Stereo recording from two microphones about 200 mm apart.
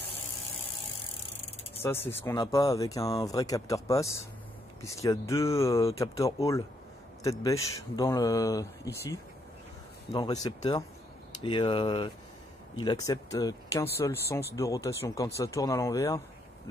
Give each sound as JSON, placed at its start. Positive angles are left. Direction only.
{"t": 1.8, "sound": "speech", "side_deg": 15}